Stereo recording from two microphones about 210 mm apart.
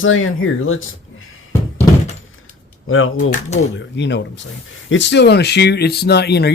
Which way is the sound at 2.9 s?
75° left (ahead or behind).